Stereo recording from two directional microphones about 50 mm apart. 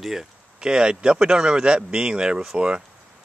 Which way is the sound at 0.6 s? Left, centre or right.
Centre.